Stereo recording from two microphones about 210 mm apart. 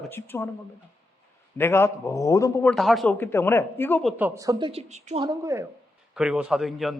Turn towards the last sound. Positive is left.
turn(degrees=0)  # may be behind; listen again after turning